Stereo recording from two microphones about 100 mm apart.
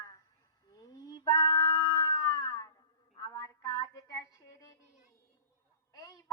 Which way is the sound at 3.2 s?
35° left (ahead or behind).